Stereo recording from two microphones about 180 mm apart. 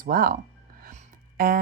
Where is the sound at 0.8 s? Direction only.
50° right (ahead or behind).